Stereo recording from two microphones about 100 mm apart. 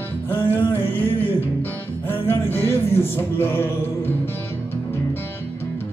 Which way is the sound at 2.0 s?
20° left (ahead or behind).